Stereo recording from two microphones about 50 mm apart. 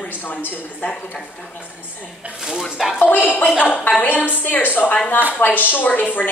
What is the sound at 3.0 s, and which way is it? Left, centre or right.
A woman's voice, left.